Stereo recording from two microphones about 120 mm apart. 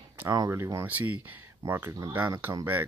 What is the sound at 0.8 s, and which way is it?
Speech, 15° right (ahead or behind).